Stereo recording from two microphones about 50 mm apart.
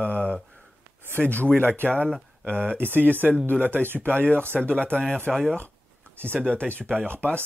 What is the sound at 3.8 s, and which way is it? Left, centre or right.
Speech, right.